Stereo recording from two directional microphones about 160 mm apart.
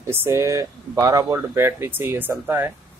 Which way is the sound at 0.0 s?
15° right (ahead or behind).